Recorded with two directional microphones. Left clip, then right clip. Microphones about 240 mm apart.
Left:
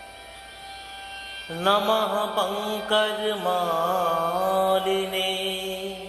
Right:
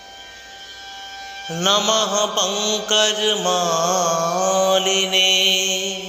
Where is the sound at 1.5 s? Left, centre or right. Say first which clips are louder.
Right 4 dB; centre.